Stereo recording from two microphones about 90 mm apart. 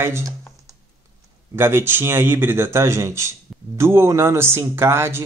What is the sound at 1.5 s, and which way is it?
Speech, 25° right (ahead or behind).